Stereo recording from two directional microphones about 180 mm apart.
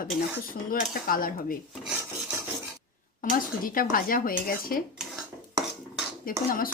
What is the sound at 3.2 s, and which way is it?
Speech, 50° left (ahead or behind).